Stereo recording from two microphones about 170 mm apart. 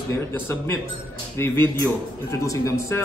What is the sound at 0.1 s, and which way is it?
A man's voice, 15° left (ahead or behind).